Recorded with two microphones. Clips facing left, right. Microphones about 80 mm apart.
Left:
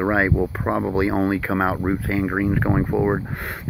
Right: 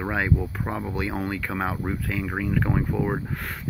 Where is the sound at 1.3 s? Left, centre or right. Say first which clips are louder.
Left 7 dB; left.